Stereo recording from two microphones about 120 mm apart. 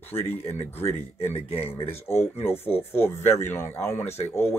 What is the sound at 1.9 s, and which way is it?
Speech, 20° left (ahead or behind).